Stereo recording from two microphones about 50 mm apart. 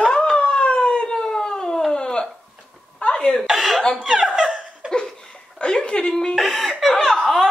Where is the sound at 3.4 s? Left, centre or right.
Centre.